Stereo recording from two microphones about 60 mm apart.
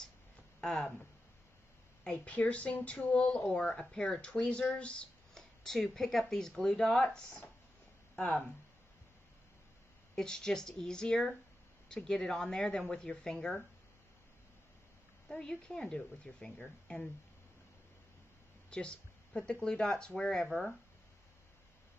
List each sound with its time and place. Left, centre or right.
2.0 s speech: centre
10.1 s speech: centre
15.2 s speech: centre
18.7 s speech: centre